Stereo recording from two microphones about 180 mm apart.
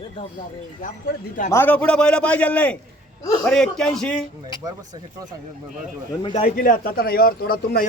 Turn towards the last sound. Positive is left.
turn(degrees=60)  # may be behind; listen again after turning